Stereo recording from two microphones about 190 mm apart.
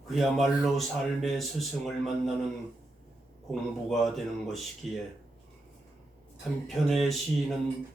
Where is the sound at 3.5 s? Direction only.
Centre (ahead or behind).